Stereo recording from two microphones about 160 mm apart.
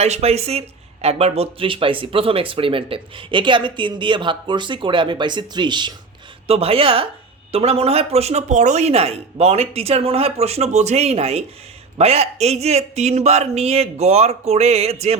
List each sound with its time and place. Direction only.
0.0 s speech: 40° right (ahead or behind)